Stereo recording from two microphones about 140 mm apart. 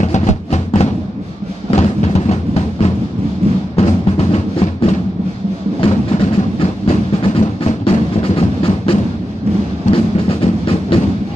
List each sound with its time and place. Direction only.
0.0 s music: 55° left (ahead or behind)
1.8 s a sound: 50° left (ahead or behind)
3.7 s music: 50° left (ahead or behind)
9.8 s train: 45° left (ahead or behind)